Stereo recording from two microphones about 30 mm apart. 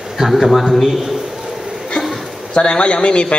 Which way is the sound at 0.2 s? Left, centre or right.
Centre.